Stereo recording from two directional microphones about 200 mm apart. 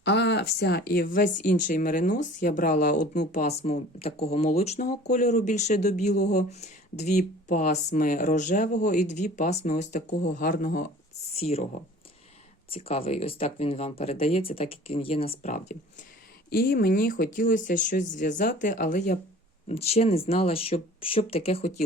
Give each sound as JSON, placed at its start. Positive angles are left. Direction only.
{"t": 0.0, "sound": "speech", "side_deg": 60}
{"t": 6.1, "sound": "speech", "side_deg": 50}
{"t": 6.5, "sound": "speech", "side_deg": 35}
{"t": 11.3, "sound": "speech", "side_deg": 30}
{"t": 12.7, "sound": "speech", "side_deg": 30}
{"t": 16.5, "sound": "speech", "side_deg": 50}